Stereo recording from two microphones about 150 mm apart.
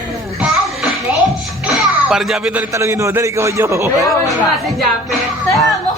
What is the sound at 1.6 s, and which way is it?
Music, 5° right (ahead or behind).